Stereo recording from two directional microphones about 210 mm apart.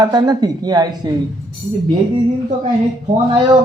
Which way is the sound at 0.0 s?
20° right (ahead or behind).